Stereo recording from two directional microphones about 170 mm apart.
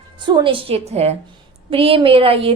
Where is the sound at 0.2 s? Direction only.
30° right (ahead or behind).